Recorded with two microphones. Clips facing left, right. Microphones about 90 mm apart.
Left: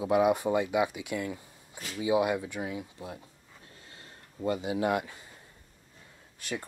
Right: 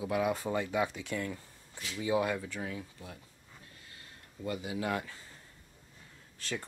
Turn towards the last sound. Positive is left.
turn(degrees=15)  # may be behind; listen again after turning